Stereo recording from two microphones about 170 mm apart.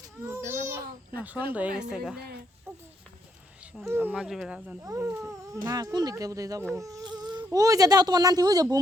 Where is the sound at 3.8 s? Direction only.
15° right (ahead or behind).